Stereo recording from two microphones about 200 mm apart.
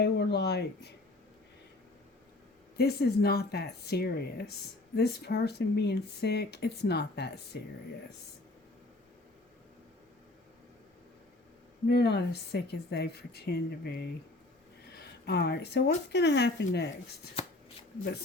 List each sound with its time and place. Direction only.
0.0 s speech: 60° left (ahead or behind)
2.7 s a woman's voice: 55° left (ahead or behind)
11.9 s a woman's voice: 55° left (ahead or behind)
14.8 s a sound: 55° left (ahead or behind)
16.1 s speech: 60° left (ahead or behind)